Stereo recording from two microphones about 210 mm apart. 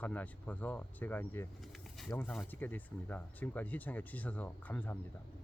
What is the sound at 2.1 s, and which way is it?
Speech, 10° left (ahead or behind).